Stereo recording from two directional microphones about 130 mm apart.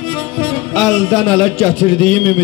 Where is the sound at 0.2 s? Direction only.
5° left (ahead or behind).